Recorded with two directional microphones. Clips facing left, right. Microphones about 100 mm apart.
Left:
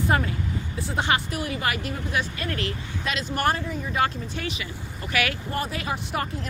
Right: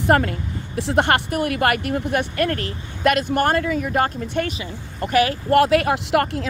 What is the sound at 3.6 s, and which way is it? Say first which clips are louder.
Speech: right 8 dB; 80° right.